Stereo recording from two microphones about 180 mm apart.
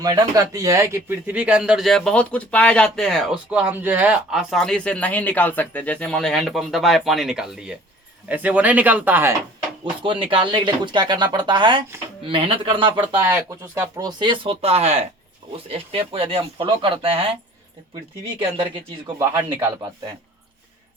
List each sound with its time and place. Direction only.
0.0 s speech: 20° right (ahead or behind)
10.0 s speech: 30° right (ahead or behind)
13.1 s speech: 10° right (ahead or behind); by 17.3 s 30° right (ahead or behind)
18.3 s speech: 30° right (ahead or behind)
19.2 s speech: 15° right (ahead or behind)